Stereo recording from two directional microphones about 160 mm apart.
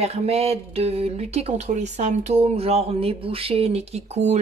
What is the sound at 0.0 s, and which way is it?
A woman's voice, 40° right (ahead or behind).